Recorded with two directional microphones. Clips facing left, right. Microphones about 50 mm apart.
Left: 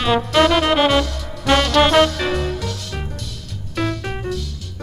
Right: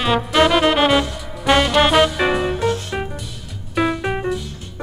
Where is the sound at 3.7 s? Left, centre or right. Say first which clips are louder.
Right 4 dB; centre.